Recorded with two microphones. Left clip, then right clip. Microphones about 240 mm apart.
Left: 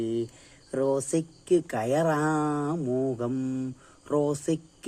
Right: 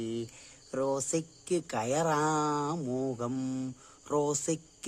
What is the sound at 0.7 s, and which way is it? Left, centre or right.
Speech, centre.